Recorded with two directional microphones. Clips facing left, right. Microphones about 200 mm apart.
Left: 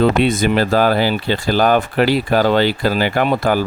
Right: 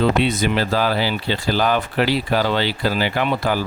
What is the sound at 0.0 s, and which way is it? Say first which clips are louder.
Speech: left 4 dB; 50° left (ahead or behind).